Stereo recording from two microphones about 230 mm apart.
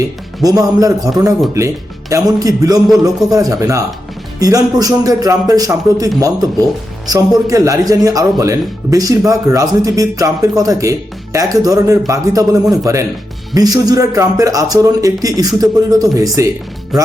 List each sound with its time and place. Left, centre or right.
0.4 s speech: centre
3.1 s a man's voice: centre
3.3 s speech: centre